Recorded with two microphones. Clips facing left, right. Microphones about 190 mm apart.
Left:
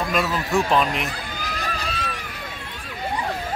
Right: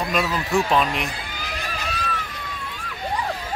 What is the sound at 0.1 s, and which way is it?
Speech, centre (ahead or behind).